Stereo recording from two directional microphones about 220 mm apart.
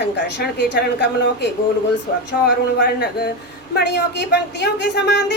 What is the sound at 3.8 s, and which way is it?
A woman's voice, 50° left (ahead or behind).